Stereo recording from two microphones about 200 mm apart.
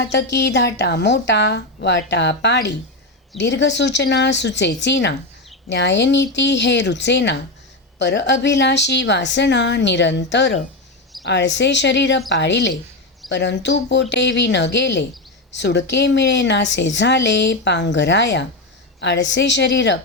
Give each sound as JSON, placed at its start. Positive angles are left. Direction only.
{"t": 0.3, "sound": "a woman's voice", "side_deg": 60}